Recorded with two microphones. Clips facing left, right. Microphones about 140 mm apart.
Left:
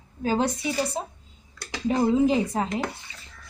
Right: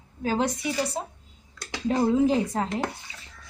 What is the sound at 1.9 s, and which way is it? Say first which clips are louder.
Speech: left 1 dB; 5° left (ahead or behind).